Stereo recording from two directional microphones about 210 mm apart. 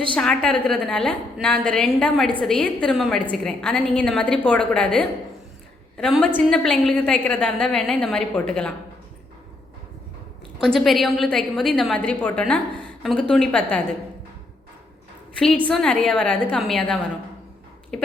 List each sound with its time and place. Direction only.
0.1 s a woman's voice: 5° left (ahead or behind)
10.6 s a woman's voice: centre (ahead or behind)
15.6 s a woman's voice: 5° left (ahead or behind)